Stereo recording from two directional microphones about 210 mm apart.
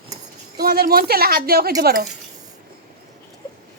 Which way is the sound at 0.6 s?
45° right (ahead or behind).